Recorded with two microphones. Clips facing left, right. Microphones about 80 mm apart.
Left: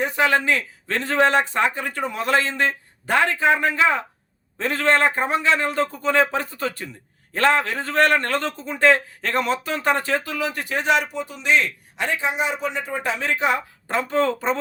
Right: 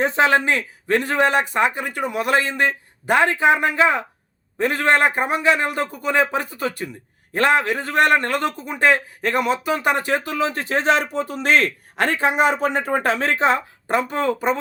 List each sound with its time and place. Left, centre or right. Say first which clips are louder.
0.0 s a man's voice: right 3 dB; right
13.8 s a man's voice: even; centre